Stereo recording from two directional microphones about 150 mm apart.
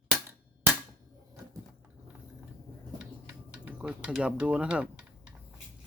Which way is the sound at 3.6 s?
5° right (ahead or behind).